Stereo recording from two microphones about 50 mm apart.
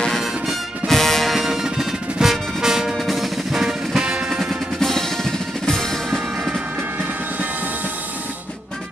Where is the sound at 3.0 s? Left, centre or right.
Centre.